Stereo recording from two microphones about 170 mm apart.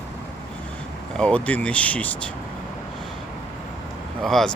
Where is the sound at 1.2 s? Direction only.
10° left (ahead or behind).